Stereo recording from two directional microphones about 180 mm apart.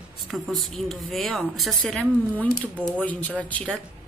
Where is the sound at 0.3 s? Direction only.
Centre (ahead or behind).